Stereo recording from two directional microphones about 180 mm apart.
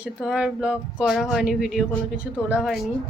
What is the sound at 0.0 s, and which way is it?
Speech, 5° right (ahead or behind).